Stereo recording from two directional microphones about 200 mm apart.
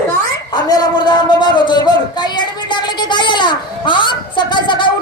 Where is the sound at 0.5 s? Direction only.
20° left (ahead or behind).